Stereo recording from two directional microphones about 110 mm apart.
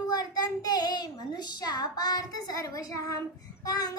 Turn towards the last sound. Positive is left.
turn(degrees=35)  # may be behind; listen again after turning